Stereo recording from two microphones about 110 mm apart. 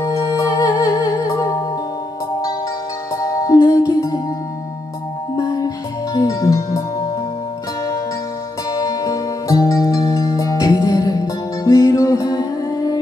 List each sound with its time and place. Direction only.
0.0 s music: 30° left (ahead or behind)
3.2 s music: 30° left (ahead or behind)
5.4 s music: 35° left (ahead or behind)
8.7 s music: 30° left (ahead or behind)